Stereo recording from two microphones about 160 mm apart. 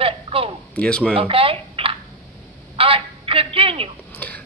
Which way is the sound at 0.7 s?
5° left (ahead or behind).